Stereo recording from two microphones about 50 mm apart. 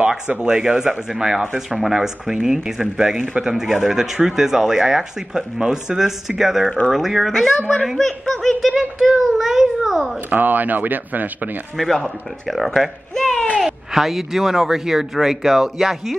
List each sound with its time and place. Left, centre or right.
0.3 s speech: centre
8.7 s speech: centre
10.3 s speech: right
11.7 s speech: centre